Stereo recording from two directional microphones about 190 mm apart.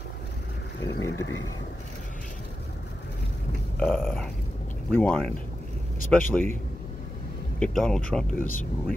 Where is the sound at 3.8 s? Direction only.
Centre (ahead or behind).